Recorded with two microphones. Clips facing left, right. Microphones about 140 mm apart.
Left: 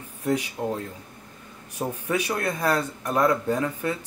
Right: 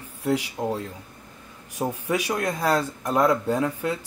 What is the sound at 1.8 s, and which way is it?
Speech, 10° right (ahead or behind).